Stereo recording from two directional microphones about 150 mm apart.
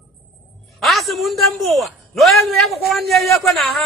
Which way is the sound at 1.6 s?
Centre (ahead or behind).